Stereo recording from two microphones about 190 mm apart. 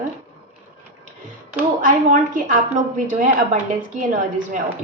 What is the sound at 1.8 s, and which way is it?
Speech, 45° right (ahead or behind).